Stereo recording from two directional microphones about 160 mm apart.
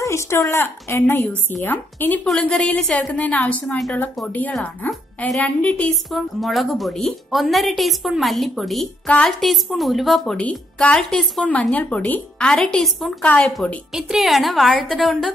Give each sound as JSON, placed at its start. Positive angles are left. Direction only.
{"t": 0.0, "sound": "a woman's voice", "side_deg": 20}